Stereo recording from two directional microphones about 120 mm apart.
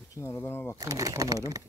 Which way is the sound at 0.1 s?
25° left (ahead or behind).